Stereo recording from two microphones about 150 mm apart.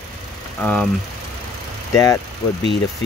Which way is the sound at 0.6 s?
10° left (ahead or behind).